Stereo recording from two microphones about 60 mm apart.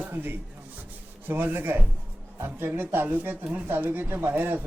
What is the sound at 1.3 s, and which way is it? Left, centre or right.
A man's voice, right.